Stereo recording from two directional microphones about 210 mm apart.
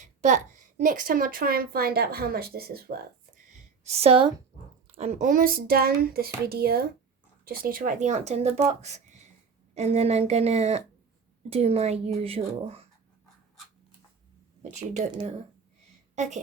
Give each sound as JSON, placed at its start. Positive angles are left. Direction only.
{"t": 0.0, "sound": "a woman's voice", "side_deg": -35}
{"t": 3.8, "sound": "speech", "side_deg": -30}
{"t": 14.6, "sound": "a woman's voice", "side_deg": -30}